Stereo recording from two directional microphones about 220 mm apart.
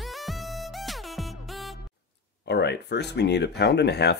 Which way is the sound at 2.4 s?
50° left (ahead or behind).